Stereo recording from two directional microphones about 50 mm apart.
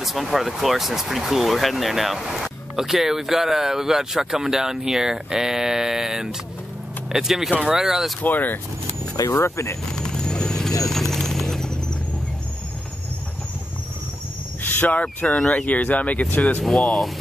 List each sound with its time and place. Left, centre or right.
0.0 s speech: centre
8.2 s speech: left
9.3 s speech: left
9.9 s vehicle: centre
14.6 s speech: left
16.7 s speech: centre